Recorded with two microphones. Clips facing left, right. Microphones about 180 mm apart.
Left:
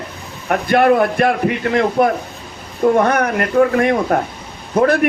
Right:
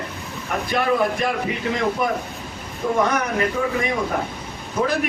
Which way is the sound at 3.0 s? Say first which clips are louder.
Left 5 dB; 60° left (ahead or behind).